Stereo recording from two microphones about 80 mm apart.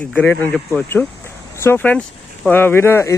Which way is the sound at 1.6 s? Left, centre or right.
Left.